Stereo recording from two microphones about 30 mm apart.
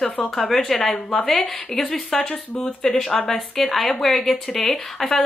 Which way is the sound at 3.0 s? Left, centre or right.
Left.